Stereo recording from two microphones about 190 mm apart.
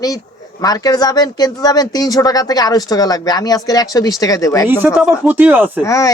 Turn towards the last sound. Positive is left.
turn(degrees=15)  # may be behind; listen again after turning